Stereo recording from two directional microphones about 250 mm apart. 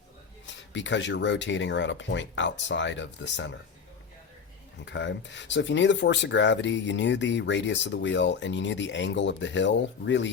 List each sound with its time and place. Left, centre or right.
0.4 s speech: left
4.9 s speech: left